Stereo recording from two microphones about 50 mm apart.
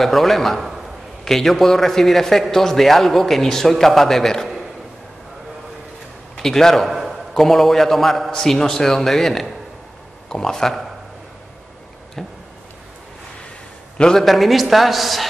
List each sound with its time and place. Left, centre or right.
0.0 s a man's voice: centre
6.3 s a man's voice: centre
6.9 s a sound: centre
7.3 s a man's voice: centre
12.2 s a man's voice: centre
13.9 s a man's voice: centre
14.2 s a man's voice: centre